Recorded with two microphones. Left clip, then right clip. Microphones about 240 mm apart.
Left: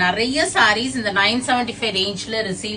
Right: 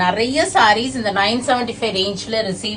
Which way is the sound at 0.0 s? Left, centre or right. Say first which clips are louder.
Right 2 dB; centre.